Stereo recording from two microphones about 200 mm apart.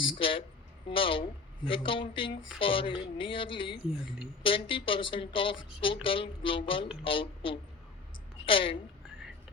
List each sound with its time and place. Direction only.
0.1 s speech: 25° left (ahead or behind)